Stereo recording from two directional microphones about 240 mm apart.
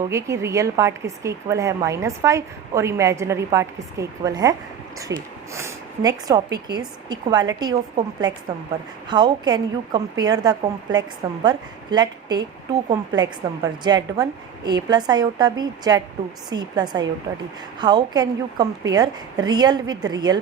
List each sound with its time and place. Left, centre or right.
0.1 s a woman's voice: centre
9.0 s a woman's voice: centre